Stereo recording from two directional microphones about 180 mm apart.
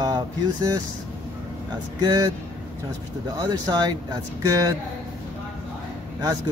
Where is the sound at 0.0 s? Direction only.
20° right (ahead or behind).